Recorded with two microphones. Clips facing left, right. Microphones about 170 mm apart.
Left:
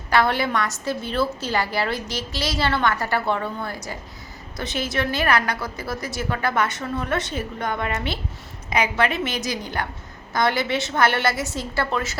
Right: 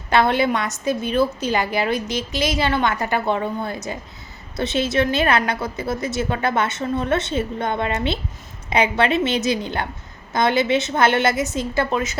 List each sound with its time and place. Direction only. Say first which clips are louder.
0.1 s a woman's voice: right 3 dB; 20° right (ahead or behind)